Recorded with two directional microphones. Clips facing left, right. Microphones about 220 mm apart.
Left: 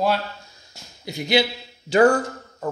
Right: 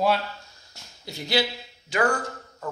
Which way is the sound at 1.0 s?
15° left (ahead or behind).